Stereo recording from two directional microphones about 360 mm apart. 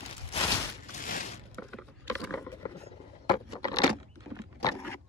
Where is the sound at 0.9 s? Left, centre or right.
Left.